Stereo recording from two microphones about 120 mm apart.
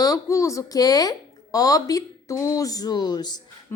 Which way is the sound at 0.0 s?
30° left (ahead or behind).